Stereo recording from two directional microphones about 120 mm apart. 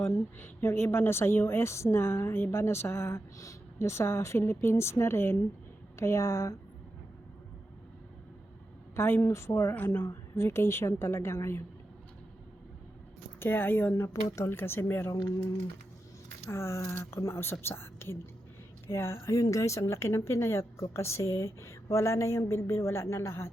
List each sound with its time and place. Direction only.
0.0 s speech: 20° left (ahead or behind)
9.0 s speech: 20° left (ahead or behind)
13.4 s speech: 15° left (ahead or behind)
16.5 s speech: 20° left (ahead or behind)